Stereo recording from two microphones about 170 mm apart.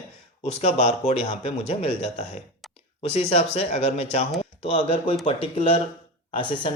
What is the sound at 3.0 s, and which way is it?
Speech, 40° left (ahead or behind).